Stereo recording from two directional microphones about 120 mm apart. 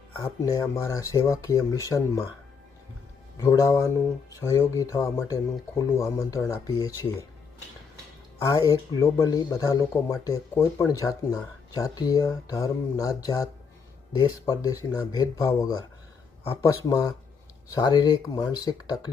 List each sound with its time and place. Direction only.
0.2 s speech: 25° left (ahead or behind)
3.4 s speech: 25° left (ahead or behind)
8.4 s speech: 30° left (ahead or behind)